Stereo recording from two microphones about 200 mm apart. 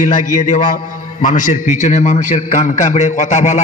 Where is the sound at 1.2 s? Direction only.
40° left (ahead or behind).